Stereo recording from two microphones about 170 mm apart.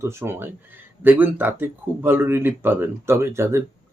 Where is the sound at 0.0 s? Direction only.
15° right (ahead or behind).